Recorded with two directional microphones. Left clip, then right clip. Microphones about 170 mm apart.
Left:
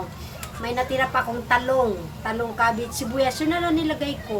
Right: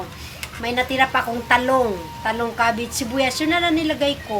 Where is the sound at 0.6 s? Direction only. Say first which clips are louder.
Right 4 dB; 15° right (ahead or behind).